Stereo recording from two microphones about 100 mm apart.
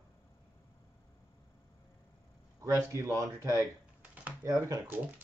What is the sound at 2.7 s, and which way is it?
Speech, 25° right (ahead or behind).